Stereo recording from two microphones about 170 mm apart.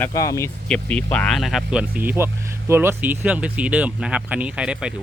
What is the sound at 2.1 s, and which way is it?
Speech, 15° right (ahead or behind).